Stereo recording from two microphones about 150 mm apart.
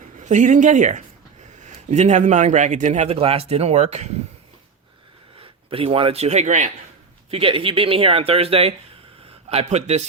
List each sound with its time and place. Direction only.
0.2 s a man's voice: 55° right (ahead or behind)
5.4 s a man's voice: 40° right (ahead or behind)
7.3 s speech: 40° right (ahead or behind)